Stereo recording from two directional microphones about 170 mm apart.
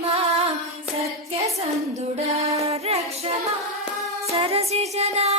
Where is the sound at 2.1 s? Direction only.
40° right (ahead or behind).